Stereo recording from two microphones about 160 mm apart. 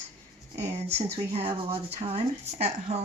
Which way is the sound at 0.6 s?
40° right (ahead or behind).